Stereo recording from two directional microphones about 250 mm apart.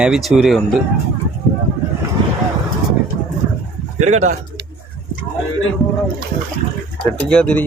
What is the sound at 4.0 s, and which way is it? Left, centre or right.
Speech, right.